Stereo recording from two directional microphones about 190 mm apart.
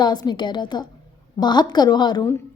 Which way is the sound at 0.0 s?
20° left (ahead or behind).